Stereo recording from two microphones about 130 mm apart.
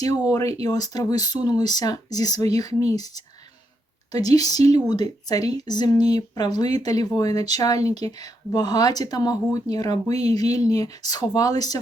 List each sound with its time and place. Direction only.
0.3 s speech: 25° left (ahead or behind)